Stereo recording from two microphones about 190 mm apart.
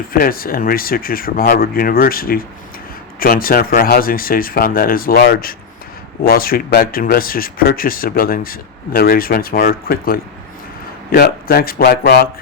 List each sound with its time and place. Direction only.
0.1 s speech: 50° left (ahead or behind)